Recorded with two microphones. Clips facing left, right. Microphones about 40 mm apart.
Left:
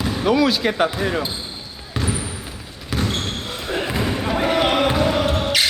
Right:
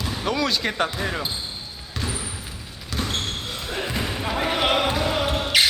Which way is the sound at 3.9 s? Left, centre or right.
Centre.